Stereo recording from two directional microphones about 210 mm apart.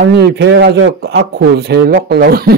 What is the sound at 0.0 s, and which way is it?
Speech, 50° right (ahead or behind).